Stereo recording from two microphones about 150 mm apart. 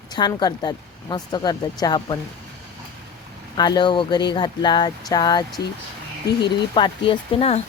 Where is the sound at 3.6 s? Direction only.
30° left (ahead or behind).